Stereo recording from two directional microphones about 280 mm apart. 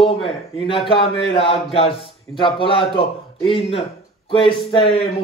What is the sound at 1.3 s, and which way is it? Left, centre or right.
Speech, centre.